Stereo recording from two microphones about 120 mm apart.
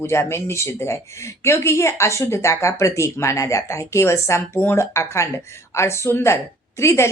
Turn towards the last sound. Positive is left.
turn(degrees=25)  # may be behind; listen again after turning